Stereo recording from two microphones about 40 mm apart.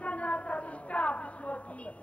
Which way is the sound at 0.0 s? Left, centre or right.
Left.